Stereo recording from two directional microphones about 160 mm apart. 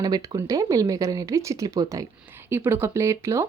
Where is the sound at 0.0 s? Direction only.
25° right (ahead or behind).